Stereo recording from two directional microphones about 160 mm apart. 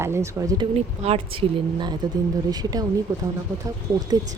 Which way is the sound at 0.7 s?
40° right (ahead or behind).